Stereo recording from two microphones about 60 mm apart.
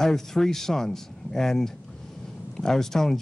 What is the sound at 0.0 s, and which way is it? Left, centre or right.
A man's voice, centre.